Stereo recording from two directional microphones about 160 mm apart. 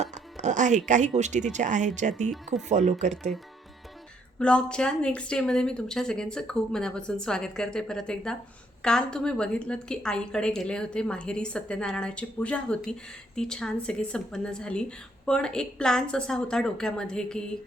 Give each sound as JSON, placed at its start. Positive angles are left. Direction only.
{"t": 0.0, "sound": "speech", "side_deg": -45}
{"t": 4.4, "sound": "a woman's voice", "side_deg": 5}